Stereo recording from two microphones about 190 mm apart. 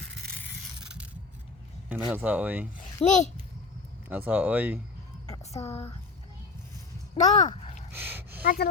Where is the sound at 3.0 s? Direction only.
30° left (ahead or behind).